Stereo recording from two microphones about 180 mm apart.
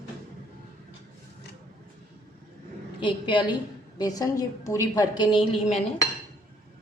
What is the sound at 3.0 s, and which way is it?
A woman's voice, 25° left (ahead or behind).